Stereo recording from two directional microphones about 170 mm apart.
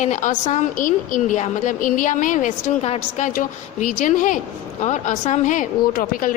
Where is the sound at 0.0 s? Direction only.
45° left (ahead or behind).